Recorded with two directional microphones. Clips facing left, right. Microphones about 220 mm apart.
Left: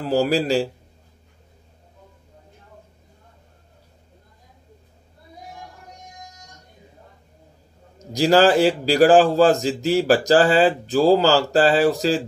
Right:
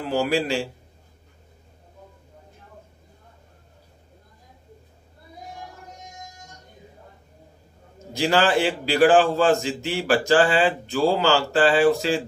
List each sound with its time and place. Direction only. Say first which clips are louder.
0.0 s a man's voice: left 3 dB; 35° left (ahead or behind)
8.1 s a man's voice: left 5 dB; 40° left (ahead or behind)